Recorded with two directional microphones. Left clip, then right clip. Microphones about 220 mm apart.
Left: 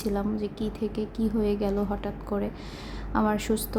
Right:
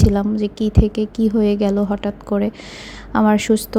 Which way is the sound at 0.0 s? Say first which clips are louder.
Right 10 dB; 30° right (ahead or behind).